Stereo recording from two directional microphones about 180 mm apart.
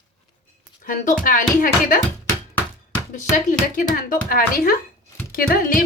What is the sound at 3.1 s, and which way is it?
A woman's voice, 45° left (ahead or behind).